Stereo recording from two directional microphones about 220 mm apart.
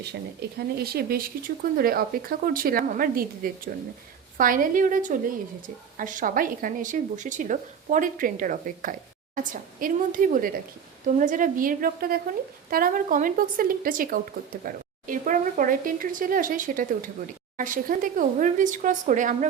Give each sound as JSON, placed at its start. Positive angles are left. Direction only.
{"t": 0.4, "sound": "a woman's voice", "side_deg": -45}